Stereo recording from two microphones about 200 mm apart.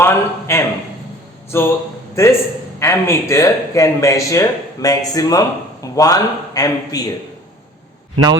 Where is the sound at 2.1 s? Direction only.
15° left (ahead or behind).